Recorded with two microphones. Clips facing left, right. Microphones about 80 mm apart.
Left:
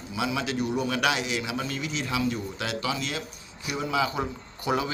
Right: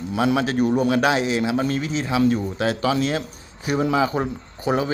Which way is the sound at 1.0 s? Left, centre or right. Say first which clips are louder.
Right 7 dB; right.